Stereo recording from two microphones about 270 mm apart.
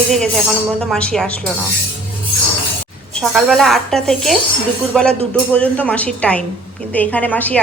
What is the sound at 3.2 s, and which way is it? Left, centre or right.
A woman's voice, centre.